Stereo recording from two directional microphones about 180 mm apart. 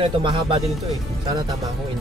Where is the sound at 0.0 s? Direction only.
30° right (ahead or behind).